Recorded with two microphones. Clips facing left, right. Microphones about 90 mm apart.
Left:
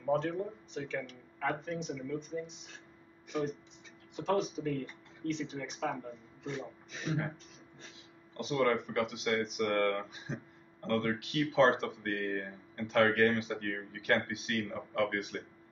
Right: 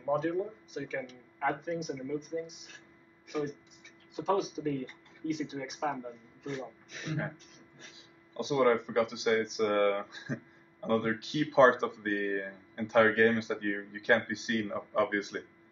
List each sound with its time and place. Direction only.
0.0 s speech: 10° right (ahead or behind)
4.2 s speech: 5° right (ahead or behind)
8.4 s speech: 20° right (ahead or behind)